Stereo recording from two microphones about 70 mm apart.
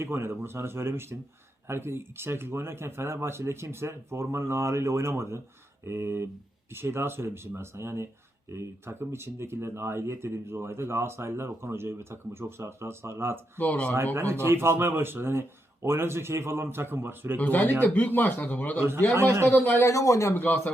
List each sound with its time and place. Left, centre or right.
0.0 s speech: right
13.6 s speech: centre
13.9 s speech: right
17.4 s speech: left
18.8 s speech: right
19.5 s speech: left
19.8 s a man's voice: left
20.3 s speech: left